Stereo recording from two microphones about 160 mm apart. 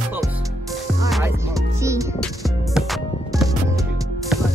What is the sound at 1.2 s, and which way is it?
Music, 15° right (ahead or behind).